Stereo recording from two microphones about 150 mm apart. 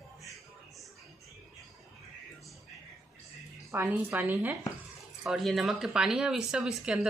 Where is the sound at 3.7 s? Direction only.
15° right (ahead or behind).